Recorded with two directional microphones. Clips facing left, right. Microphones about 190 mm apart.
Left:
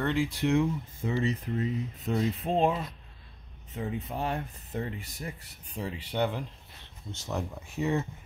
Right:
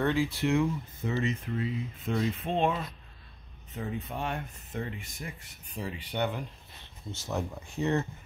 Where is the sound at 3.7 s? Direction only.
30° left (ahead or behind).